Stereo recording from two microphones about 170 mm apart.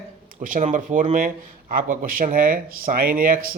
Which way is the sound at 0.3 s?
50° right (ahead or behind).